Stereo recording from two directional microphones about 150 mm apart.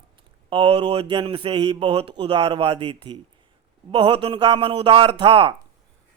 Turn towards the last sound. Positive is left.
turn(degrees=-35)  # may be behind; listen again after turning